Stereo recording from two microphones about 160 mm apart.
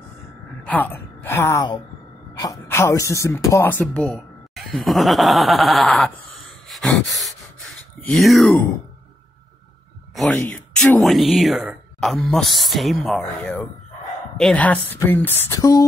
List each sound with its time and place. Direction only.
0.7 s a woman's voice: 10° left (ahead or behind)
10.1 s speech: centre (ahead or behind)
11.1 s speech: centre (ahead or behind); by 15.8 s 20° left (ahead or behind)